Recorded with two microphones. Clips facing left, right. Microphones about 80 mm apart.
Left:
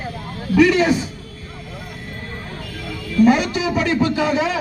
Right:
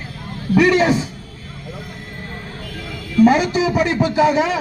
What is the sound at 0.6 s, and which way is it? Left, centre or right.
Speech, right.